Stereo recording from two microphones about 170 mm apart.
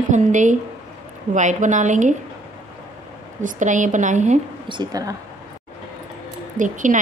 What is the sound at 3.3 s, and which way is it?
A woman's voice, 45° right (ahead or behind).